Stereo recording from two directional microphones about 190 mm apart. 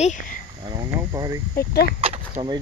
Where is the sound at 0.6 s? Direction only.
20° right (ahead or behind).